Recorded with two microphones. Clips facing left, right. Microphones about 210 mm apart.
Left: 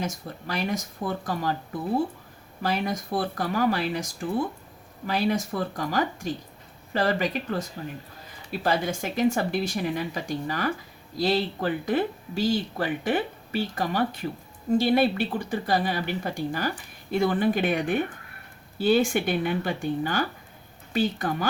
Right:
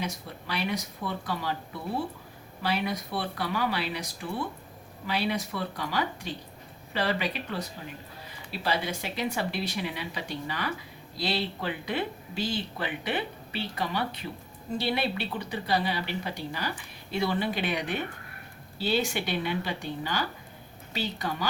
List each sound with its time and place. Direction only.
0.0 s speech: 45° left (ahead or behind)